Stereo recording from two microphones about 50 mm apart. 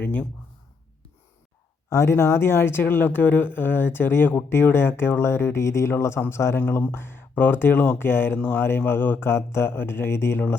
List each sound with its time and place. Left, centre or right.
0.0 s a sound: left
1.9 s a man's voice: left
6.9 s speech: left
8.4 s speech: left